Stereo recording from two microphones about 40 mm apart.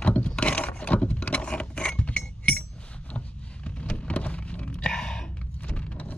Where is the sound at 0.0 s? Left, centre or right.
Left.